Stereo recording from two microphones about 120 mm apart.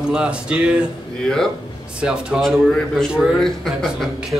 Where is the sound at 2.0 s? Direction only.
10° right (ahead or behind).